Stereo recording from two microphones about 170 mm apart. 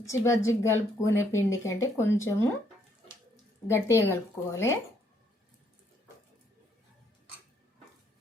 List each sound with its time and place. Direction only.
0.1 s speech: 15° left (ahead or behind)
3.7 s speech: 15° left (ahead or behind)